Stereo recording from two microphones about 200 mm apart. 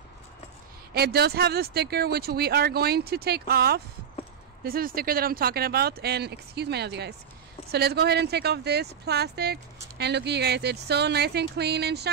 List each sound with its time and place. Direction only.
0.9 s speech: 50° right (ahead or behind)